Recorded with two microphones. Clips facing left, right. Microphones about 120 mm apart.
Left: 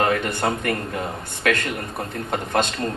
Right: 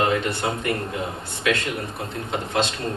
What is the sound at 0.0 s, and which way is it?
A man's voice, 50° left (ahead or behind).